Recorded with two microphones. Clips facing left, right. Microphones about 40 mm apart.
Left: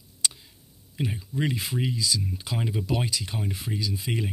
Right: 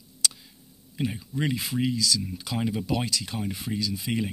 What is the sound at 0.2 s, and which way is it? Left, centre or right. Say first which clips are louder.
Tick: right 1 dB; centre.